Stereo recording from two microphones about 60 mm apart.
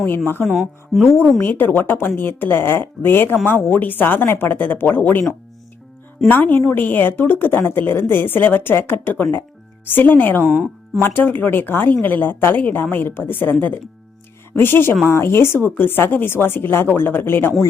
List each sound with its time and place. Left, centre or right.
0.3 s speech: left
0.9 s speech: centre
1.4 s speech: left
6.2 s speech: left
10.5 s speech: centre
11.0 s speech: left